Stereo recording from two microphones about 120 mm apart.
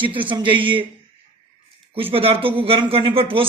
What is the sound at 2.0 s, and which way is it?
A man's voice, 50° right (ahead or behind).